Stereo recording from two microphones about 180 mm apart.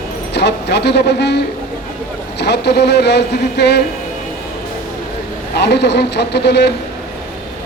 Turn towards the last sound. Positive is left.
turn(degrees=65)  # may be behind; listen again after turning